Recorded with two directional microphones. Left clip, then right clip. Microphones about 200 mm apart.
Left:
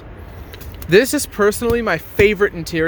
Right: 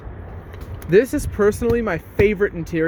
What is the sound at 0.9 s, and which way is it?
Speech, 15° left (ahead or behind).